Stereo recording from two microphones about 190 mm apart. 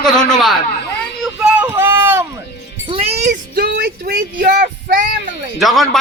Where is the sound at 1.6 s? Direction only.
10° right (ahead or behind).